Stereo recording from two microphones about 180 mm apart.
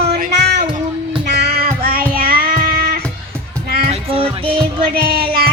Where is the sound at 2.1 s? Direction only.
55° right (ahead or behind).